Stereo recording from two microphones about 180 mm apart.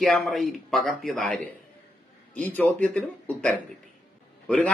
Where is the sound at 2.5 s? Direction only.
10° left (ahead or behind).